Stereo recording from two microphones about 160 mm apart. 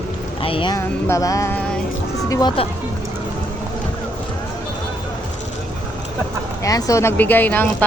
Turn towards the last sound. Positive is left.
turn(degrees=10)  # may be behind; listen again after turning